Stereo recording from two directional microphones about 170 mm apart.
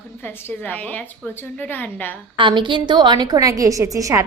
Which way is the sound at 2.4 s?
30° right (ahead or behind).